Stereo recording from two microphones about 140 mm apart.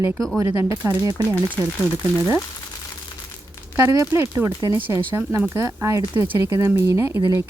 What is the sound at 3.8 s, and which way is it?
Speech, 20° right (ahead or behind).